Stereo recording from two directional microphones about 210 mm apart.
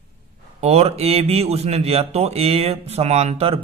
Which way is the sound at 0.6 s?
30° right (ahead or behind).